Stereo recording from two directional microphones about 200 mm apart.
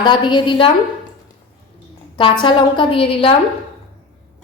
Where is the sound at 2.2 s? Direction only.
25° left (ahead or behind).